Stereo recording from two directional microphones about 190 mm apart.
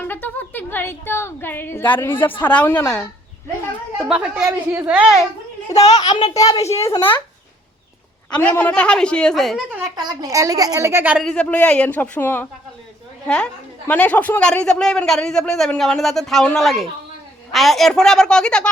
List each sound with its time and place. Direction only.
0.0 s a woman's voice: 10° left (ahead or behind)
4.1 s a woman's voice: 5° right (ahead or behind)
5.7 s a child's voice: 35° left (ahead or behind)
6.0 s a child's voice: 25° left (ahead or behind)
6.6 s a child's voice: 35° left (ahead or behind)
6.8 s a woman's voice: 15° left (ahead or behind)
8.3 s a woman's voice: 5° left (ahead or behind)
9.9 s a woman's voice: 20° right (ahead or behind)
11.2 s a woman's voice: 5° left (ahead or behind)